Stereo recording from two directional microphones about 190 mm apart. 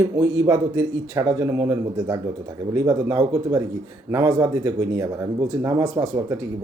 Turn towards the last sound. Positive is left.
turn(degrees=-15)  # may be behind; listen again after turning